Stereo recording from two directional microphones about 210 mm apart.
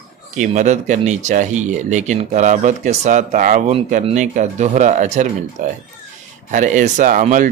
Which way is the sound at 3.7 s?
25° right (ahead or behind).